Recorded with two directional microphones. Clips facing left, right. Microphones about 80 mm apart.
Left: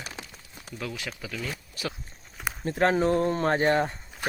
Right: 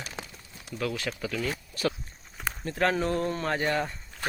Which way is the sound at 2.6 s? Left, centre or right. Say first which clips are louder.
Left 4 dB; left.